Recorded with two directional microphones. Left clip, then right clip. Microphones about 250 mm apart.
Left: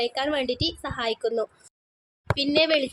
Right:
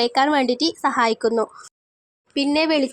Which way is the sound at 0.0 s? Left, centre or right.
Right.